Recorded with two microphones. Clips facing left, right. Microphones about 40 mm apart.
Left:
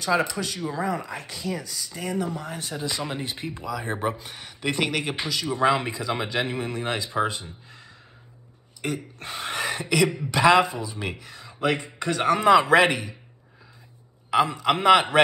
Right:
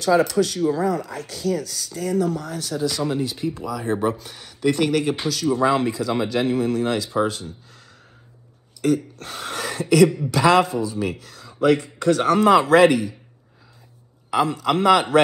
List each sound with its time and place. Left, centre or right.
0.0 s speech: left
8.8 s speech: left
12.7 s speech: left
14.3 s speech: left